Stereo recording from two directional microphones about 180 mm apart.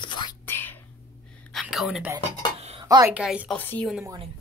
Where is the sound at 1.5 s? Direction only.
Centre (ahead or behind).